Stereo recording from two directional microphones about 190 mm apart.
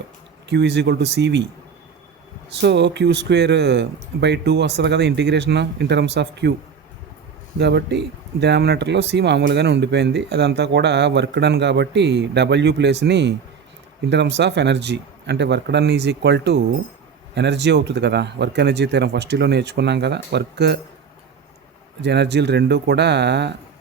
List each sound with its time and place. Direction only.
0.4 s speech: 65° right (ahead or behind)
2.6 s speech: 65° right (ahead or behind)
7.6 s speech: 65° right (ahead or behind)
22.0 s speech: 65° right (ahead or behind)